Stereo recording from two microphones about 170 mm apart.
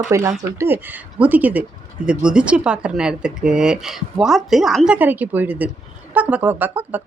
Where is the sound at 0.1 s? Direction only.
20° right (ahead or behind).